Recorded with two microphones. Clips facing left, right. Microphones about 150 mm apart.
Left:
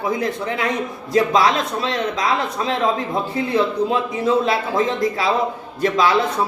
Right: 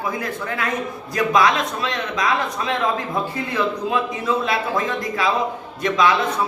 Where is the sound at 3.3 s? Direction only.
30° left (ahead or behind).